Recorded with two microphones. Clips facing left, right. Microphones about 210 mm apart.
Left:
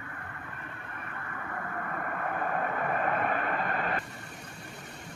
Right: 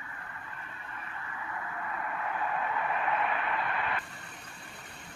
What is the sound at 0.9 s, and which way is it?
Vehicle, 55° left (ahead or behind).